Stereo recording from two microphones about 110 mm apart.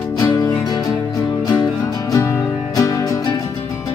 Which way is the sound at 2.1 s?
30° left (ahead or behind).